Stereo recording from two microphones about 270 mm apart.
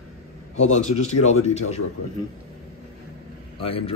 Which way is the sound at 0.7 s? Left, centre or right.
Left.